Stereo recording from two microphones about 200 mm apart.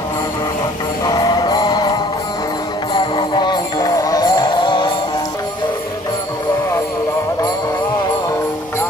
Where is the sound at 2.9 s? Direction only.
25° left (ahead or behind).